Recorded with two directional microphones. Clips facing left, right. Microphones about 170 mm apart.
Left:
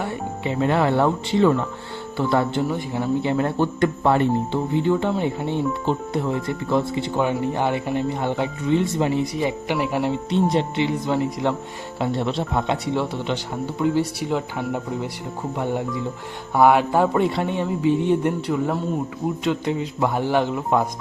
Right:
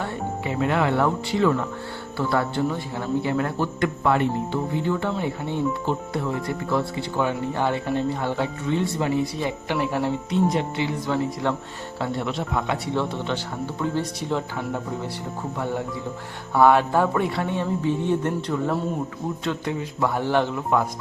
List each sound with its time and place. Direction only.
0.4 s speech: 30° left (ahead or behind)
4.7 s speech: 20° left (ahead or behind)
10.3 s speech: 30° left (ahead or behind)
12.2 s speech: 30° left (ahead or behind)